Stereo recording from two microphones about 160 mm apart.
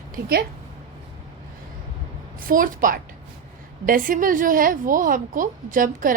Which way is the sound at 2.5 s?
60° right (ahead or behind).